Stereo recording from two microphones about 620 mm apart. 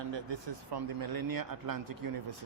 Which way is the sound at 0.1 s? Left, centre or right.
Right.